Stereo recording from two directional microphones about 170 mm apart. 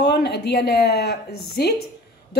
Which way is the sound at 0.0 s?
75° left (ahead or behind).